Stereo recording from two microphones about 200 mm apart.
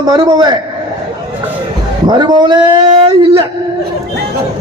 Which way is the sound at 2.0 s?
20° right (ahead or behind).